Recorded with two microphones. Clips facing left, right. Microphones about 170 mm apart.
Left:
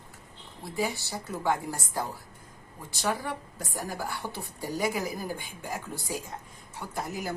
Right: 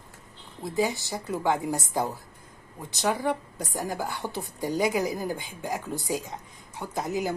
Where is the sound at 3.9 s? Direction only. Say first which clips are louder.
Right 2 dB; 15° right (ahead or behind).